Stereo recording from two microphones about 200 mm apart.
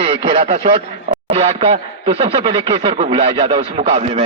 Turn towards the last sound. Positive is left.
turn(degrees=-30)  # may be behind; listen again after turning